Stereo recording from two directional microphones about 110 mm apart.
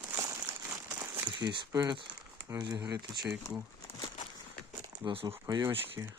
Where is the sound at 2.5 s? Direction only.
35° right (ahead or behind).